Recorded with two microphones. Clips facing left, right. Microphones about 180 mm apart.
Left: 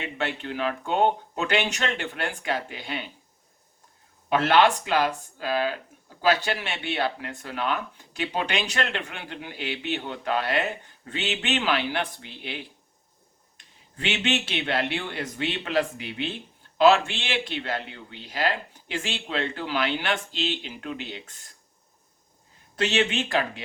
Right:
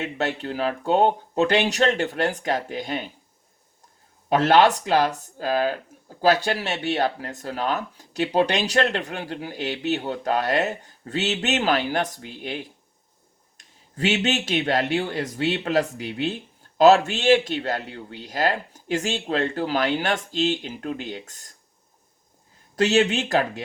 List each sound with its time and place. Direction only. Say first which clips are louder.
0.0 s speech: right 4 dB; 40° right (ahead or behind)
4.3 s a man's voice: right 3 dB; 40° right (ahead or behind)
22.7 s speech: right 5 dB; 40° right (ahead or behind)